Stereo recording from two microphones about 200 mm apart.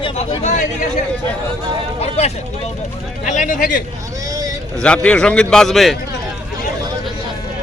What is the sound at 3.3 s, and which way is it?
Speech, 40° left (ahead or behind).